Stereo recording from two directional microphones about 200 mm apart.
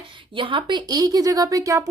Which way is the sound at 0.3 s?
25° right (ahead or behind).